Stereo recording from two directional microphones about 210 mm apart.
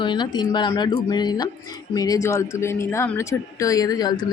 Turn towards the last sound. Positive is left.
turn(degrees=20)  # may be behind; listen again after turning